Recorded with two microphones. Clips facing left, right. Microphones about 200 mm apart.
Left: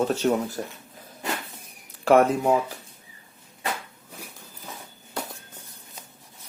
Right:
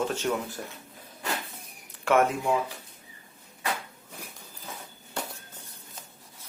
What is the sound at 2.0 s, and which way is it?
Speech, 35° left (ahead or behind).